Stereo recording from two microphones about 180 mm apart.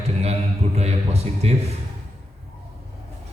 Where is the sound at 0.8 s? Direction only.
35° right (ahead or behind).